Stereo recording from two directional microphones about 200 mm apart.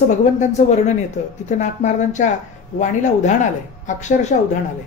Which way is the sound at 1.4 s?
35° left (ahead or behind).